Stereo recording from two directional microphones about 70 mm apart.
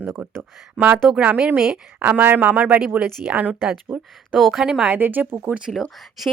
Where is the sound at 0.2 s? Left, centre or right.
Centre.